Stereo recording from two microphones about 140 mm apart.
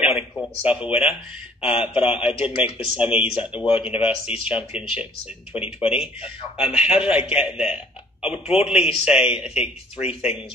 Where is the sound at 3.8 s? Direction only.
5° right (ahead or behind).